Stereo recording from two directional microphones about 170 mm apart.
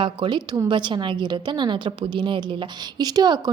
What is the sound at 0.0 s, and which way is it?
A woman's voice, 30° right (ahead or behind).